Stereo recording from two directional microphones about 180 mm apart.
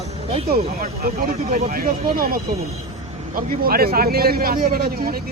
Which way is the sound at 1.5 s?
50° right (ahead or behind).